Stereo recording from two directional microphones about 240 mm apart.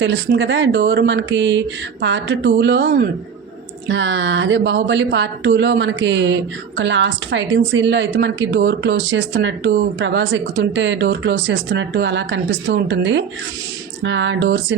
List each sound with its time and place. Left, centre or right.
0.0 s speech: right